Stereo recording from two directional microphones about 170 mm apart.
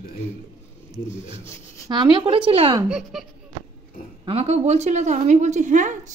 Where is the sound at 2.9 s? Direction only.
Centre (ahead or behind).